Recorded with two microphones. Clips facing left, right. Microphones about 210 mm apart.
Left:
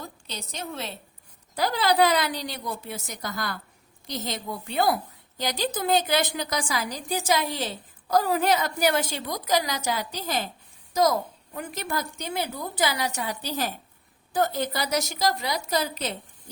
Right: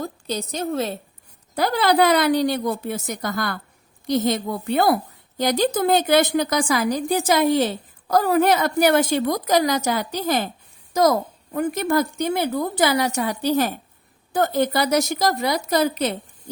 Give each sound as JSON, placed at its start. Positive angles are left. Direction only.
{"t": 0.0, "sound": "a woman's voice", "side_deg": -40}
{"t": 1.5, "sound": "a woman's voice", "side_deg": -60}